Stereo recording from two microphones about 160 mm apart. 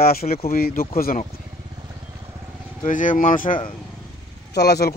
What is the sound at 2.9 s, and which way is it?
Speech, 55° left (ahead or behind).